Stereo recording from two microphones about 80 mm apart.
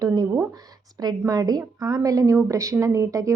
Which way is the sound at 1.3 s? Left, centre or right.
Right.